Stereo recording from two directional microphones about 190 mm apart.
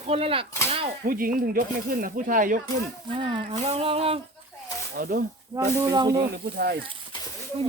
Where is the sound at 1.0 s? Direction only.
50° right (ahead or behind).